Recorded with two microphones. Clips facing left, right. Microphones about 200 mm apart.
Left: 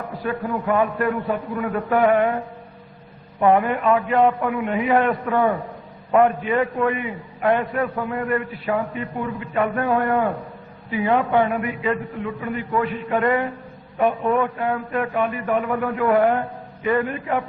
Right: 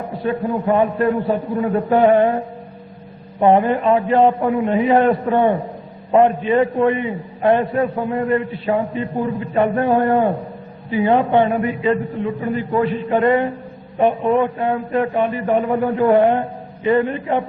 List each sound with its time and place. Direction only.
0.0 s a man's voice: 25° right (ahead or behind)
3.4 s a man's voice: 30° right (ahead or behind)